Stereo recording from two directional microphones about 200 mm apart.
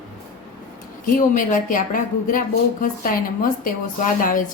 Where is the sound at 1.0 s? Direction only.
40° left (ahead or behind).